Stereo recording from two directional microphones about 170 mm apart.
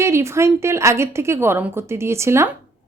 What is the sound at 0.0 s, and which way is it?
A woman's voice, 15° right (ahead or behind).